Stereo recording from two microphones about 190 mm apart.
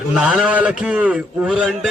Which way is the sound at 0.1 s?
5° right (ahead or behind).